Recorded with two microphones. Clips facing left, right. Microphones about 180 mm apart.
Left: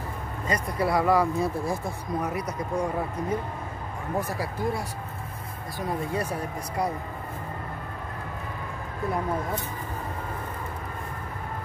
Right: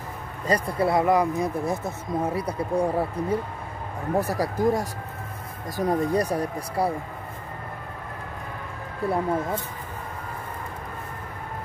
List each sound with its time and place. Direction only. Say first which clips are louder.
0.5 s speech: right 3 dB; 30° right (ahead or behind)
9.0 s speech: right 4 dB; 35° right (ahead or behind)